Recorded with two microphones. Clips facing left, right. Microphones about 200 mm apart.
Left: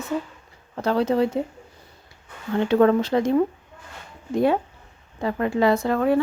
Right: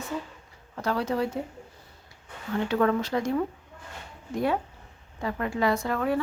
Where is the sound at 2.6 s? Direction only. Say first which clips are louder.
Left 7 dB; 30° left (ahead or behind).